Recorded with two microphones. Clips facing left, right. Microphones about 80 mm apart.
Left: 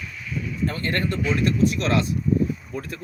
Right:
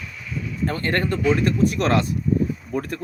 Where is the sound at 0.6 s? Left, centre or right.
Right.